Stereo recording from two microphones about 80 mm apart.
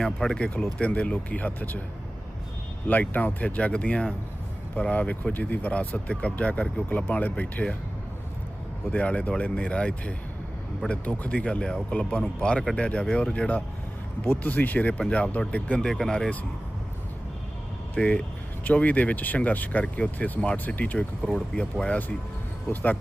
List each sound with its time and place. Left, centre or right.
0.0 s speech: centre; by 1.8 s left
2.8 s speech: left
8.9 s speech: centre
17.9 s speech: centre
21.2 s speech: centre